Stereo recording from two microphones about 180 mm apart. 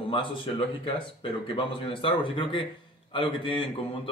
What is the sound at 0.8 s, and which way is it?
Speech, 30° left (ahead or behind).